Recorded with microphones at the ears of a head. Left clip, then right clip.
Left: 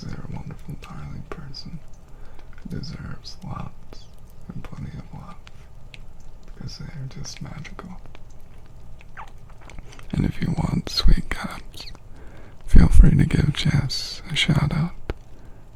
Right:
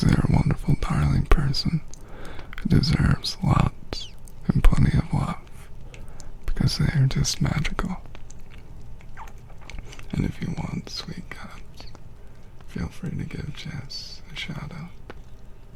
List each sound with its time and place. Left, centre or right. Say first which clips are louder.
0.0 s whispering: right 14 dB; right
6.5 s speech: right 13 dB; right
10.5 s speech: left 8 dB; left